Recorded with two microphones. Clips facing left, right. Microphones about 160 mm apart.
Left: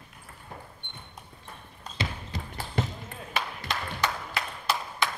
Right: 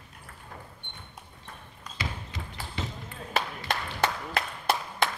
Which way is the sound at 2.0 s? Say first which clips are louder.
Left 2 dB; 25° left (ahead or behind).